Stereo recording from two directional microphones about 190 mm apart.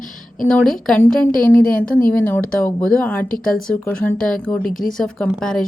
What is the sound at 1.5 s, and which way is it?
Speech, 45° left (ahead or behind).